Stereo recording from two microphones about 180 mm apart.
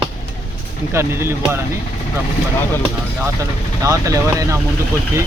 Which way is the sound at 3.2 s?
15° right (ahead or behind).